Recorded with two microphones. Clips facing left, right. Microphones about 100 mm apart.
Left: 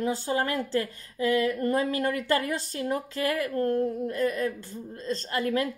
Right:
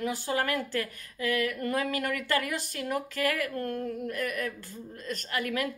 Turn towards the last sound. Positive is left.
turn(degrees=30)  # may be behind; listen again after turning